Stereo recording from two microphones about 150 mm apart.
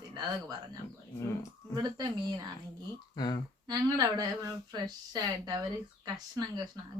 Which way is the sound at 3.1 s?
30° left (ahead or behind).